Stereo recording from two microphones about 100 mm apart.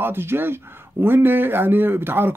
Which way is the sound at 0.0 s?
25° right (ahead or behind).